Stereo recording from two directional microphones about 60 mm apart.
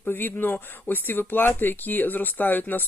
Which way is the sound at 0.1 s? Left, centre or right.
Left.